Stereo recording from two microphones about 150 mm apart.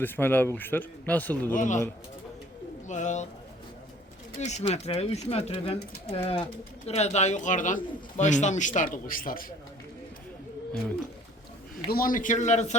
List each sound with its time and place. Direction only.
0.0 s a man's voice: 10° left (ahead or behind)
1.5 s speech: 55° left (ahead or behind)
2.8 s speech: 55° left (ahead or behind)
4.4 s speech: 50° left (ahead or behind); by 9.5 s 70° left (ahead or behind)
11.9 s speech: 70° left (ahead or behind); by 12.7 s 50° left (ahead or behind)